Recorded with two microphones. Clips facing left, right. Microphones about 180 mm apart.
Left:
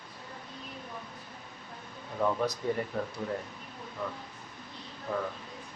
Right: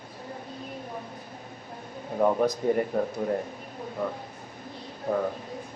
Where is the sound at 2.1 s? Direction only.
45° right (ahead or behind).